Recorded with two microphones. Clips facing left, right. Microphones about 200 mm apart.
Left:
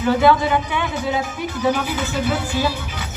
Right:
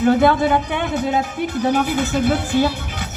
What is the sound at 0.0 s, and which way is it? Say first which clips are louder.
A woman's voice: right 2 dB; 55° right (ahead or behind).